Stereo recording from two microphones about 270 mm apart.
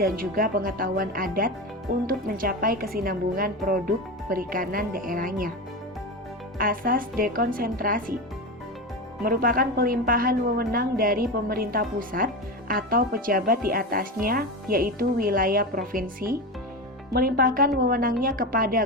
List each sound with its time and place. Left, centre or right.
0.0 s a woman's voice: right
6.6 s a woman's voice: right
9.2 s a woman's voice: right